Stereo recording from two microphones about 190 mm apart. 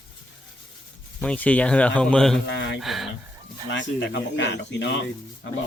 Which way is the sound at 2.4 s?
70° left (ahead or behind).